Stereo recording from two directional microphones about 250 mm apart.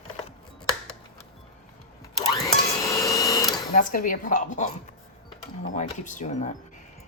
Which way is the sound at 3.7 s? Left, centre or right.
Left.